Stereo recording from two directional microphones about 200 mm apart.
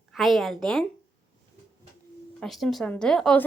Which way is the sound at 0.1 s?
Centre (ahead or behind).